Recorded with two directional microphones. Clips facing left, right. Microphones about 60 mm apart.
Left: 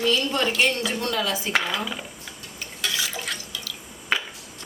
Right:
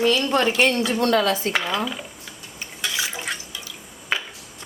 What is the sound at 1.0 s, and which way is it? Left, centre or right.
Speech, right.